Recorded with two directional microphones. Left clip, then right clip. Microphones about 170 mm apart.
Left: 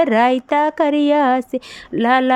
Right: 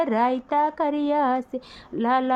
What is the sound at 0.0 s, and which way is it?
Speech, 30° left (ahead or behind).